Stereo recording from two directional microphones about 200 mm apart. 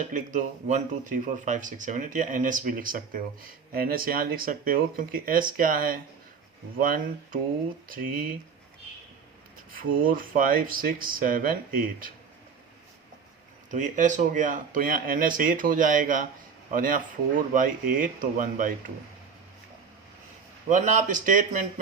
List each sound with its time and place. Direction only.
0.1 s speech: 40° right (ahead or behind)
9.7 s speech: 45° right (ahead or behind)
13.7 s speech: 40° right (ahead or behind)
20.7 s speech: 40° right (ahead or behind)